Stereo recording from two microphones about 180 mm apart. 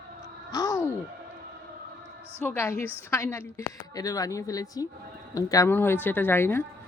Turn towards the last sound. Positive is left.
turn(degrees=15)  # may be behind; listen again after turning